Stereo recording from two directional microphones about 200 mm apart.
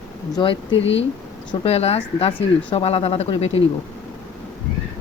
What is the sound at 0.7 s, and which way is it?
Speech, 70° left (ahead or behind).